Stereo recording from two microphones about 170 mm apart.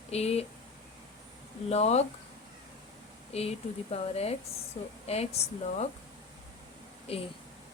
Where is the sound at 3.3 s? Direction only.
40° left (ahead or behind).